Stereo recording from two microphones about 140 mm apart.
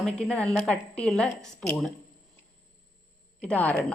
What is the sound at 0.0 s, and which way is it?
A woman's voice, 5° left (ahead or behind).